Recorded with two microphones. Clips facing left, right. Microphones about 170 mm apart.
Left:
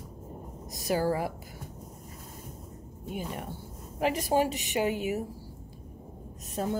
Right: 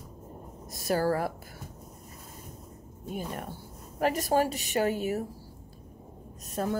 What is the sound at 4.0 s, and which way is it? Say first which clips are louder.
Speech: right 1 dB; 45° right (ahead or behind).